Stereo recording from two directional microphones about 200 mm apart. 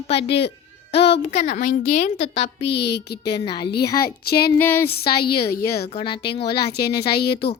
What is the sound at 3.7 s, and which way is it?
Speech, 50° left (ahead or behind).